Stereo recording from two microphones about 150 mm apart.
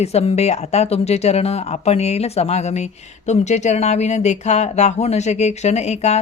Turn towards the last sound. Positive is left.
turn(degrees=45)  # may be behind; listen again after turning